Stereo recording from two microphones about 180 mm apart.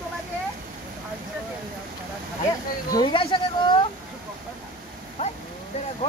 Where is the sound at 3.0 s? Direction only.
25° left (ahead or behind).